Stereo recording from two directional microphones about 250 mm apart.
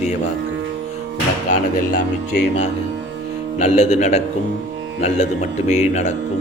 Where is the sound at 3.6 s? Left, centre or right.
Left.